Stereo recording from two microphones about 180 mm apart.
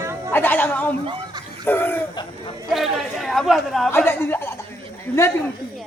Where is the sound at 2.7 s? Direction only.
Centre (ahead or behind).